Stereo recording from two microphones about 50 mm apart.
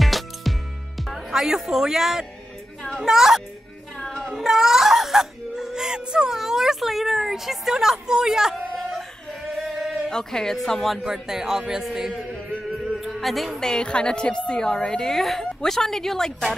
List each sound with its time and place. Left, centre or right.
0.0 s music: centre
1.0 s a man's voice: centre
4.0 s music: centre
4.3 s speech: centre
9.6 s a sound: centre
10.0 s a woman's voice: centre
11.1 s a man's voice: centre
12.9 s music: centre
13.6 s a woman's voice: centre